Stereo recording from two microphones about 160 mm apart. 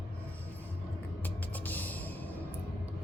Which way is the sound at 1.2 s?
10° left (ahead or behind).